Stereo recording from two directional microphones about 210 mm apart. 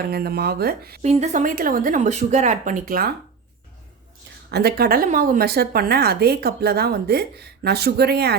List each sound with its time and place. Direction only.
0.0 s a woman's voice: 50° right (ahead or behind)
1.0 s speech: 30° right (ahead or behind)
4.5 s a woman's voice: 50° right (ahead or behind)